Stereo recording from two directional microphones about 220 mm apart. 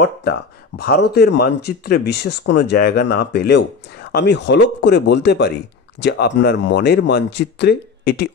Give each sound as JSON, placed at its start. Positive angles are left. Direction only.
{"t": 0.0, "sound": "speech", "side_deg": 45}